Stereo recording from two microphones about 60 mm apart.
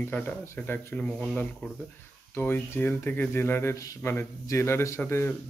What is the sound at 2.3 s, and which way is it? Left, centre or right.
A man's voice, left.